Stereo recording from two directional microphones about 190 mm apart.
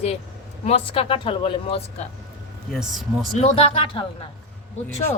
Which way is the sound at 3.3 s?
30° left (ahead or behind).